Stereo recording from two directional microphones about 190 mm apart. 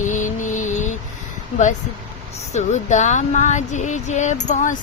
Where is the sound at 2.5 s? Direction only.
40° left (ahead or behind).